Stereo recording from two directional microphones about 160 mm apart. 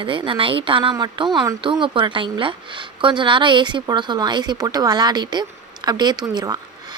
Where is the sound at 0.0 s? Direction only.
30° right (ahead or behind).